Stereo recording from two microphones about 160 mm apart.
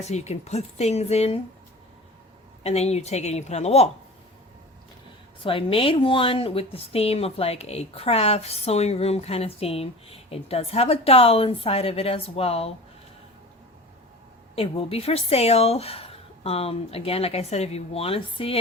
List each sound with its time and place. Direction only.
0.0 s speech: 45° left (ahead or behind)
2.6 s speech: 40° left (ahead or behind)
5.4 s a woman's voice: 35° left (ahead or behind)
14.5 s a woman's voice: 40° left (ahead or behind)